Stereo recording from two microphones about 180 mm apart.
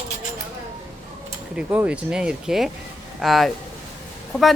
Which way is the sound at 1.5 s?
5° right (ahead or behind).